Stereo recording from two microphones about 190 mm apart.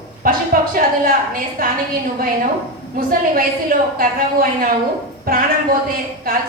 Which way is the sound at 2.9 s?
50° right (ahead or behind).